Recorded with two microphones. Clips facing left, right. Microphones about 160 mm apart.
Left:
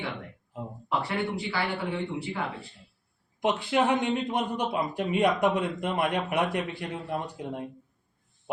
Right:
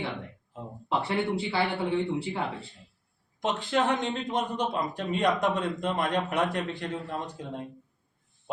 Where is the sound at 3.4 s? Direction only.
10° left (ahead or behind).